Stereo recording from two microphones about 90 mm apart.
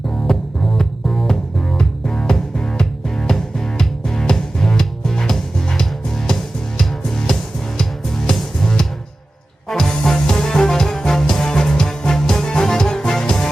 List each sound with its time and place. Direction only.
0.3 s music: centre (ahead or behind)
7.8 s music: 10° left (ahead or behind)